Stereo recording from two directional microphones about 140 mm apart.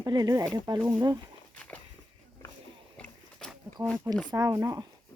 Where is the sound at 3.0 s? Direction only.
5° left (ahead or behind).